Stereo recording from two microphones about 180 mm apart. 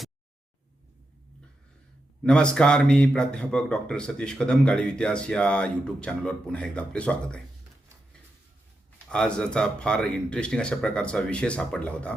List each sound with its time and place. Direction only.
2.2 s a man's voice: 5° left (ahead or behind)
9.0 s a man's voice: 5° left (ahead or behind)